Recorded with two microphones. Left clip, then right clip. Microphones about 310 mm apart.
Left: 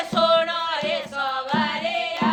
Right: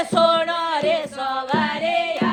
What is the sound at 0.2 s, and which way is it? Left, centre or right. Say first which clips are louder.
Music: right 1 dB; centre.